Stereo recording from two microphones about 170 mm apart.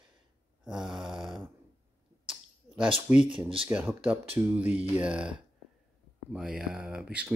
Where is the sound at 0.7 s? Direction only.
Centre (ahead or behind).